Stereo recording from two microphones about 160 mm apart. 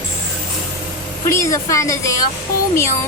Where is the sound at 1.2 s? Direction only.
20° left (ahead or behind).